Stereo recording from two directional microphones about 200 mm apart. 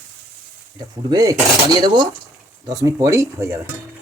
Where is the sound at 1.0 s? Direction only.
20° right (ahead or behind).